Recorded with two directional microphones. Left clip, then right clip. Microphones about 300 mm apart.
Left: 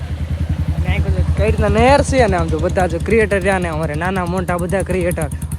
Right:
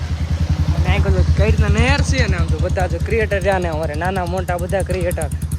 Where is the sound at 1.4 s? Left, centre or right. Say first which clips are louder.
Left 8 dB; centre.